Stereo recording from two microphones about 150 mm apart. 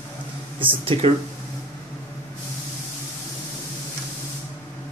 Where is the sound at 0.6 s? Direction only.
35° right (ahead or behind).